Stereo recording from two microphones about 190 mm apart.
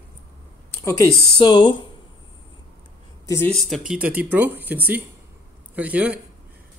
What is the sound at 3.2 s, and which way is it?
Speech, 15° left (ahead or behind).